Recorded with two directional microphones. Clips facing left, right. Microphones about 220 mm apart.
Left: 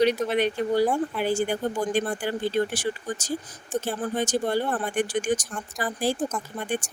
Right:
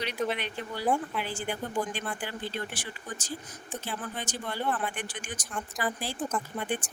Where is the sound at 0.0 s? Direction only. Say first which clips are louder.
Left 10 dB; 45° left (ahead or behind).